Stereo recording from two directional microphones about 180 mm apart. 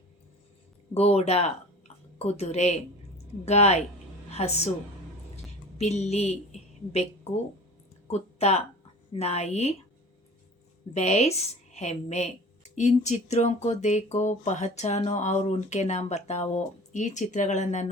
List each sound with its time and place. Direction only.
0.9 s a woman's voice: 35° left (ahead or behind)
5.7 s a woman's voice: 40° left (ahead or behind)
10.9 s a woman's voice: 40° left (ahead or behind)